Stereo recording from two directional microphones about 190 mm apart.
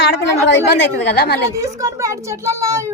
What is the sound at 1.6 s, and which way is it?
A child's voice, 15° right (ahead or behind).